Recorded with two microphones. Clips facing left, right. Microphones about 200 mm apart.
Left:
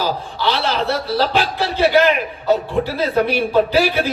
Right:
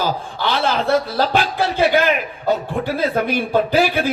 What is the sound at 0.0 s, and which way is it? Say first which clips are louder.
A man's voice: left 1 dB; 50° right (ahead or behind).